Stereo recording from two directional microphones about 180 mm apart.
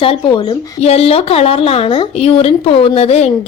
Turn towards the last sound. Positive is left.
turn(degrees=35)  # may be behind; listen again after turning